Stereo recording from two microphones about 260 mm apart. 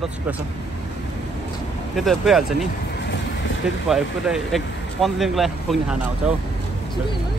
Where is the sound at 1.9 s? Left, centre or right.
Centre.